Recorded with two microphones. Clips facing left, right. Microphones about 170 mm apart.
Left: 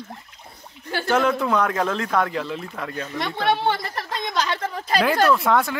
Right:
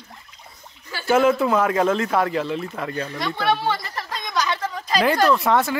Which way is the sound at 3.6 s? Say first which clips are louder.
Left 1 dB; 55° left (ahead or behind).